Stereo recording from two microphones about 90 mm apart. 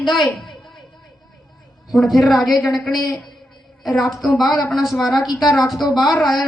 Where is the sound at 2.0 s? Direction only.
Centre (ahead or behind).